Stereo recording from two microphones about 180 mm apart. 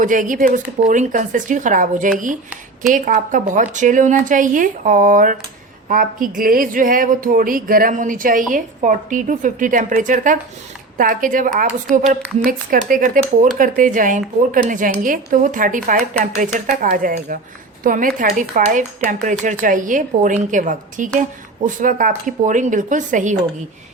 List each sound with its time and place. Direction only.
0.0 s speech: 50° right (ahead or behind)
11.9 s a woman's voice: 5° left (ahead or behind)
12.4 s speech: 50° right (ahead or behind)